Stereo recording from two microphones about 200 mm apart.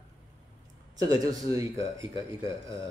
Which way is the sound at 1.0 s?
20° right (ahead or behind).